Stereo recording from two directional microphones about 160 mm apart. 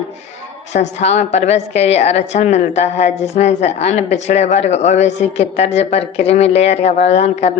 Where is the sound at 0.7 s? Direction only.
45° left (ahead or behind).